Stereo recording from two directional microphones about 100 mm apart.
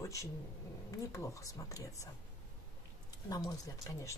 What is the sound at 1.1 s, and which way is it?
Speech, 30° left (ahead or behind).